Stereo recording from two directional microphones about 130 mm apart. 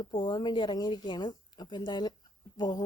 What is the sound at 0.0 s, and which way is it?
Speech, 35° left (ahead or behind).